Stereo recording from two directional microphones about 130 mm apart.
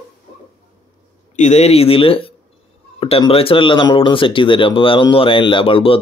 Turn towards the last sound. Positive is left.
turn(degrees=45)  # may be behind; listen again after turning